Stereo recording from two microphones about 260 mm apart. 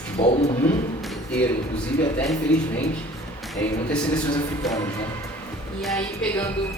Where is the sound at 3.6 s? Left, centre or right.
Centre.